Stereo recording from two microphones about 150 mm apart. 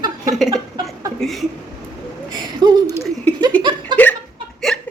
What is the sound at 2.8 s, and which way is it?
Laughter, 15° left (ahead or behind).